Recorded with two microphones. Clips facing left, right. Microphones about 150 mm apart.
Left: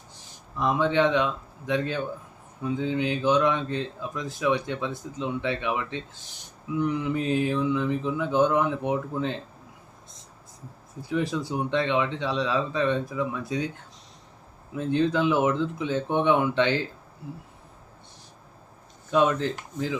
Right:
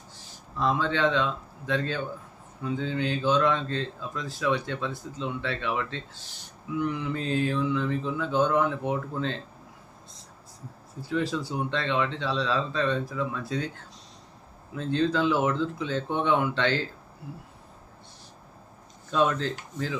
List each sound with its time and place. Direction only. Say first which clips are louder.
0.6 s speech: left 3 dB; 15° left (ahead or behind)
11.1 s speech: left 1 dB; 20° left (ahead or behind)
14.8 s speech: left 2 dB; 15° left (ahead or behind)
19.1 s speech: left 3 dB; 15° left (ahead or behind)